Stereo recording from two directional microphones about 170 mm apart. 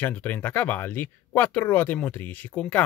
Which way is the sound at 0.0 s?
10° left (ahead or behind).